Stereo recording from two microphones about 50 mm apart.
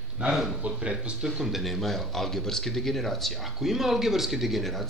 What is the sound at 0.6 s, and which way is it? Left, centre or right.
Speech, centre.